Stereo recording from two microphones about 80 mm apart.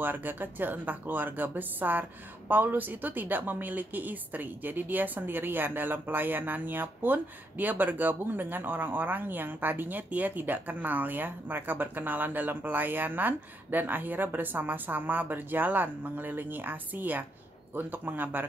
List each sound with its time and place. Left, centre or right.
0.0 s speech: right